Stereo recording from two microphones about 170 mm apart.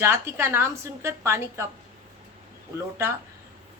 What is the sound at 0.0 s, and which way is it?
A woman's voice, 15° right (ahead or behind).